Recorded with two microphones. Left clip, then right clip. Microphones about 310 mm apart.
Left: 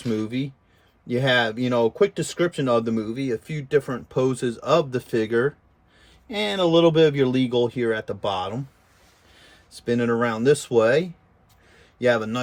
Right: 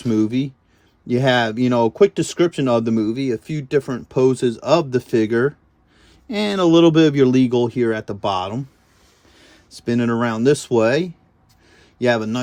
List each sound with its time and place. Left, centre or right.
1.0 s speech: centre
9.8 s speech: centre